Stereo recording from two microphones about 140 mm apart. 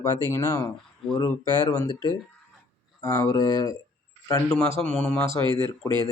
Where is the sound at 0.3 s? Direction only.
15° left (ahead or behind).